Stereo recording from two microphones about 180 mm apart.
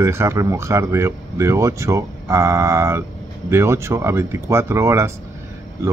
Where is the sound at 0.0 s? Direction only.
15° right (ahead or behind).